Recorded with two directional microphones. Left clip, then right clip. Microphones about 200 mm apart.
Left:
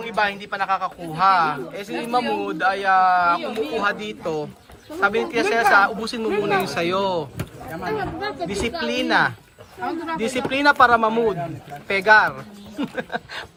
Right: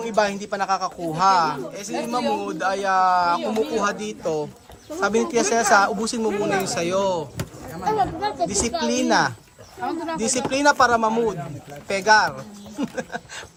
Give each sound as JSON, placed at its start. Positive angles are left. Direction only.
{"t": 0.1, "sound": "speech", "side_deg": -30}
{"t": 3.4, "sound": "speech", "side_deg": -60}
{"t": 3.8, "sound": "speech", "side_deg": -20}
{"t": 6.1, "sound": "speech", "side_deg": -20}